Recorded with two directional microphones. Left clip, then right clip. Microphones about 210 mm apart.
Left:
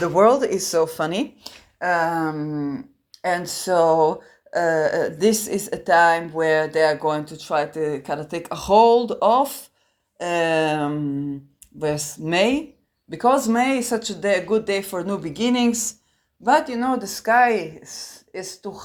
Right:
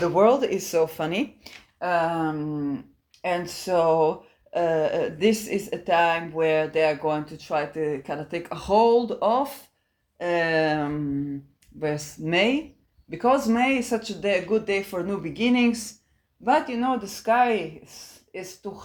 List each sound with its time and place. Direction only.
0.0 s speech: 15° left (ahead or behind)